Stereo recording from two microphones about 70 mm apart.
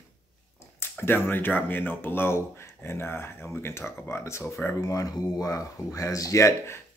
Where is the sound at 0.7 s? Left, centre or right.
Left.